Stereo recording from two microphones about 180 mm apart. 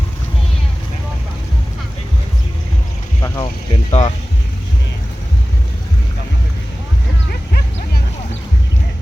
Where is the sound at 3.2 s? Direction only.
25° left (ahead or behind).